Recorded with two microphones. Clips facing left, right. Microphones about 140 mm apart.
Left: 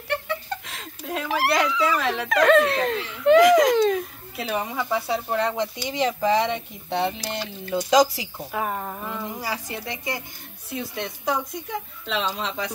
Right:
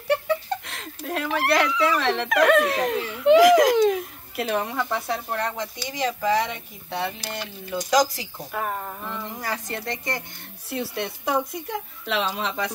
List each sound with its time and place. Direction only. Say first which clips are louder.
0.7 s speech: right 1 dB; centre (ahead or behind)
2.2 s speech: left 2 dB; 10° right (ahead or behind)
4.4 s a woman's voice: right 2 dB; 5° left (ahead or behind)
5.4 s speech: left 4 dB; 15° left (ahead or behind)
8.4 s a woman's voice: left 1 dB; 5° left (ahead or behind)
10.7 s a woman's voice: right 2 dB; 5° right (ahead or behind)